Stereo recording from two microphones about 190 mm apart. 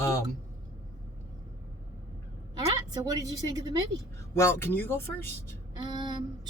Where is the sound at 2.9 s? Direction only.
20° right (ahead or behind).